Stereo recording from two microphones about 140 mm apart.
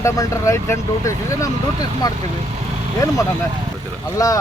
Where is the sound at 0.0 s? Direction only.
20° left (ahead or behind).